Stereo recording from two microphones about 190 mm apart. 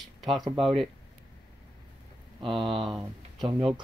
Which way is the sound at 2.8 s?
Centre (ahead or behind).